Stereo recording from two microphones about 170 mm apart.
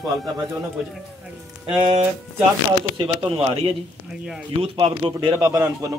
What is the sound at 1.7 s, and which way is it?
A man's voice, 30° right (ahead or behind).